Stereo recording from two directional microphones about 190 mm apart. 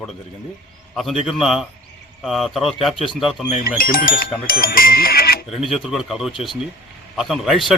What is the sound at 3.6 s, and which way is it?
Speech, 50° left (ahead or behind).